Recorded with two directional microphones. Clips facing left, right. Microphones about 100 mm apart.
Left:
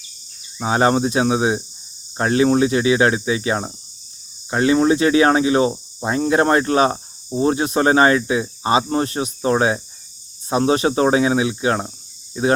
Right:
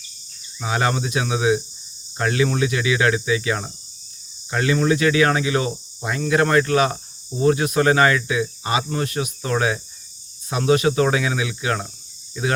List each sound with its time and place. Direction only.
0.6 s cricket: 30° left (ahead or behind)
12.3 s speech: 30° left (ahead or behind)